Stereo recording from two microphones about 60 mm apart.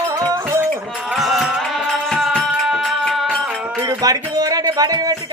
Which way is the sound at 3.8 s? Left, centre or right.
Right.